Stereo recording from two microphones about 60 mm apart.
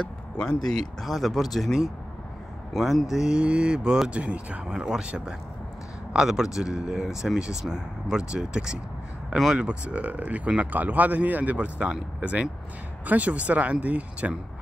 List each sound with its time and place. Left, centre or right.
0.4 s speech: centre; by 14.3 s right